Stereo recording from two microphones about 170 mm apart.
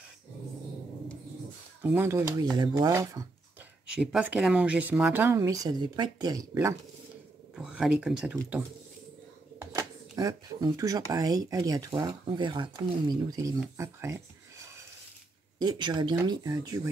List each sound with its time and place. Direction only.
2.0 s speech: 15° right (ahead or behind)
3.9 s speech: 5° right (ahead or behind)
7.5 s speech: 5° right (ahead or behind)
9.8 s speech: 20° right (ahead or behind)
15.6 s speech: 25° right (ahead or behind)